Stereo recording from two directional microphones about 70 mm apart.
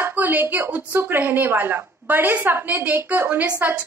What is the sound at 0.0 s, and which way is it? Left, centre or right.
A woman's voice, right.